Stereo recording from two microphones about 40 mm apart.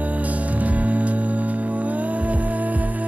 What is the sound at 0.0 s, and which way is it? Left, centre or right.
Music, right.